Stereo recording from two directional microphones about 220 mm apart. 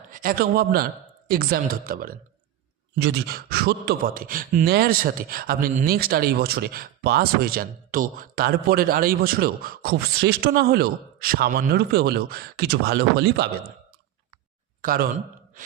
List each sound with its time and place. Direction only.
0.1 s a man's voice: 40° right (ahead or behind)
14.8 s speech: 40° right (ahead or behind)